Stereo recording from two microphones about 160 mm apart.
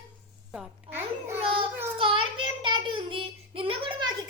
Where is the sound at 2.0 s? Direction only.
30° right (ahead or behind).